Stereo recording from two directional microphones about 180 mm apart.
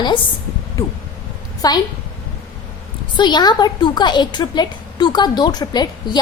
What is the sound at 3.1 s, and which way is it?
A woman's voice, 25° left (ahead or behind).